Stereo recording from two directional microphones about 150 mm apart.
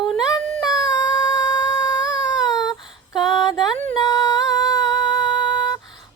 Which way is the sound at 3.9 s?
25° left (ahead or behind).